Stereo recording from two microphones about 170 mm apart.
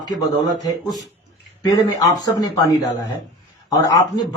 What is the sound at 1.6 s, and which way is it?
Speech, 20° left (ahead or behind).